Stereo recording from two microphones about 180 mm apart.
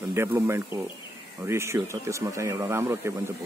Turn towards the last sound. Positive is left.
turn(degrees=-15)  # may be behind; listen again after turning